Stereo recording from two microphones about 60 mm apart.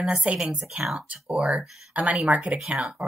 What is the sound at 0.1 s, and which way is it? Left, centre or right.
Speech, right.